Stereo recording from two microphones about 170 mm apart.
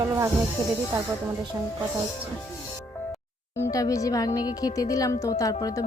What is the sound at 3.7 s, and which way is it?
A woman's voice, 20° left (ahead or behind).